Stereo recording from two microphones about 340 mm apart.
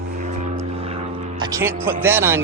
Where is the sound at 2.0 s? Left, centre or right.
Centre.